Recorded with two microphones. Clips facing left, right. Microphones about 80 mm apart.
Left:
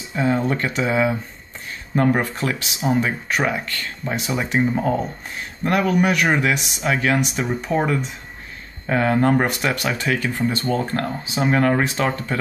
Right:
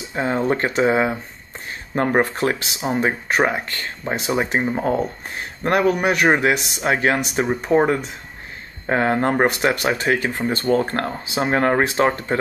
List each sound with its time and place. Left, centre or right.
0.1 s speech: right